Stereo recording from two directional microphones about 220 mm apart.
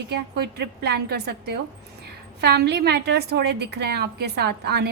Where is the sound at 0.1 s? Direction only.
50° right (ahead or behind).